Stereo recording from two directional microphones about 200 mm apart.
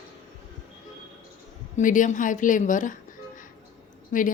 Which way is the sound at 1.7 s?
40° left (ahead or behind).